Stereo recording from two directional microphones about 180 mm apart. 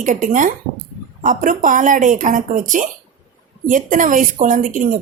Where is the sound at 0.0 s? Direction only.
45° right (ahead or behind).